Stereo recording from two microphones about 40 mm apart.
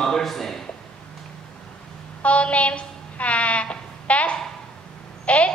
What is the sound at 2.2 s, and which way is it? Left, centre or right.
Speech, left.